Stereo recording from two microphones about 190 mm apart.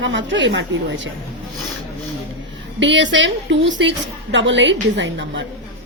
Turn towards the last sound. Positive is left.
turn(degrees=-75)  # may be behind; listen again after turning